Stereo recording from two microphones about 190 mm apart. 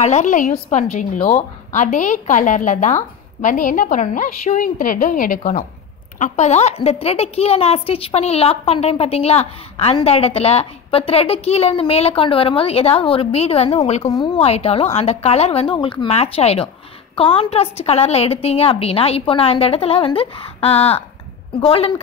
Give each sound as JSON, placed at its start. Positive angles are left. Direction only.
{"t": 0.0, "sound": "a woman's voice", "side_deg": 40}
{"t": 14.0, "sound": "a woman's voice", "side_deg": 20}